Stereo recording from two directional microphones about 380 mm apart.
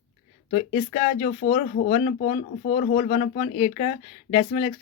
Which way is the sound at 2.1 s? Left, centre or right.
Centre.